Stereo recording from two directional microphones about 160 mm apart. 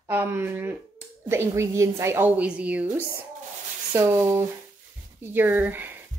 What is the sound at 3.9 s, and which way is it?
A woman's voice, 15° right (ahead or behind).